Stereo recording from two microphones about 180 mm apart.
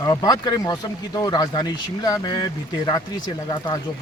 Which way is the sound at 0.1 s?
20° left (ahead or behind).